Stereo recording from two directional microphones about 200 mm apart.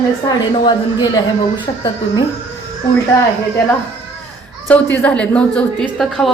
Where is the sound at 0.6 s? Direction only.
20° left (ahead or behind).